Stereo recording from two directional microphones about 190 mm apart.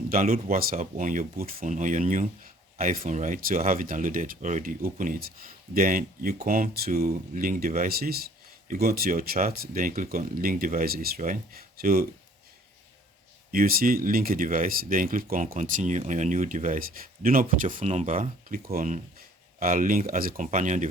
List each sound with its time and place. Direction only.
0.1 s speech: 50° right (ahead or behind)
13.5 s speech: 50° right (ahead or behind)